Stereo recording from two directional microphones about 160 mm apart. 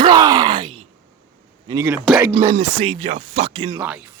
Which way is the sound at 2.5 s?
35° right (ahead or behind).